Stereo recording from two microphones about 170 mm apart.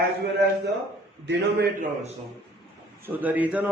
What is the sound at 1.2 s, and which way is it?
Speech, 85° right.